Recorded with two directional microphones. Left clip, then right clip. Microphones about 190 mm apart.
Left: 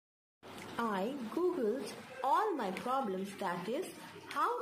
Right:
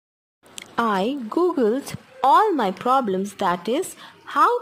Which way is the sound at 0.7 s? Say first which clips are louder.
Right 15 dB; 65° right (ahead or behind).